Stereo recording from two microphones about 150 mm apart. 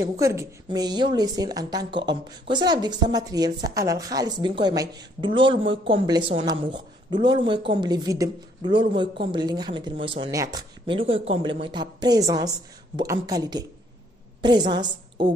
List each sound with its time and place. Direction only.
0.0 s a woman's voice: 20° right (ahead or behind); by 10.3 s 35° right (ahead or behind)
10.3 s a woman's voice: 20° right (ahead or behind)
10.9 s a woman's voice: 40° right (ahead or behind)